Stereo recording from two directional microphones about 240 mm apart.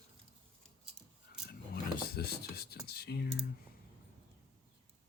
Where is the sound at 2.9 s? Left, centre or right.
Left.